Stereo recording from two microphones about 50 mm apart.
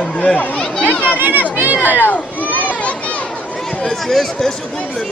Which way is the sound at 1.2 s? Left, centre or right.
Right.